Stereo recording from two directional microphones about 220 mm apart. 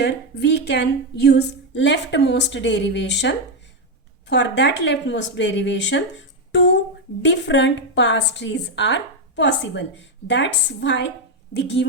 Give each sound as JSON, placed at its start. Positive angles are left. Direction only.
{"t": 0.0, "sound": "a woman's voice", "side_deg": 50}